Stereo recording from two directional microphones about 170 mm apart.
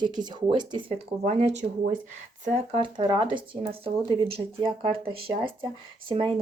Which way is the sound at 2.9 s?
25° right (ahead or behind).